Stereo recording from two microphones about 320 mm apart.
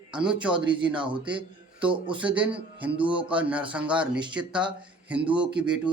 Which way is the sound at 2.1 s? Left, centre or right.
Centre.